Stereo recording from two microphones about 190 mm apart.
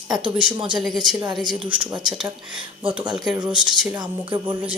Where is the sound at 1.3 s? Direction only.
25° right (ahead or behind).